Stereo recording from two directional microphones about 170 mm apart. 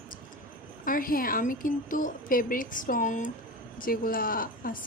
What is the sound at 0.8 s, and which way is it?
A woman's voice, 55° left (ahead or behind).